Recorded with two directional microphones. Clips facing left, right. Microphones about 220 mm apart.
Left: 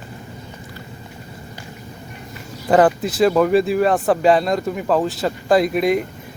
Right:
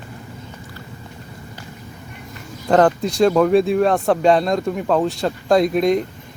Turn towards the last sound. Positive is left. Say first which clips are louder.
# right 1 dB
turn(degrees=5)  # may be behind; listen again after turning